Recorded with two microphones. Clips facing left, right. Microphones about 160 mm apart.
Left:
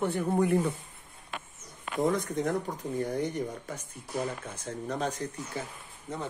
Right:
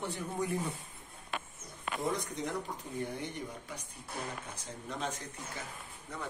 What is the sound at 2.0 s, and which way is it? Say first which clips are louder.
Speech: left 8 dB; 50° left (ahead or behind).